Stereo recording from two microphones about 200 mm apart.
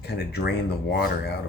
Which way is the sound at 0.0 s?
55° left (ahead or behind).